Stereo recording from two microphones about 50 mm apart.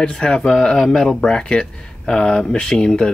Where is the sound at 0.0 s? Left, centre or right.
Centre.